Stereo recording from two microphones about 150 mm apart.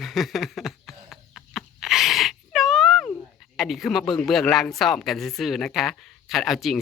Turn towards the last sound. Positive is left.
turn(degrees=0)  # may be behind; listen again after turning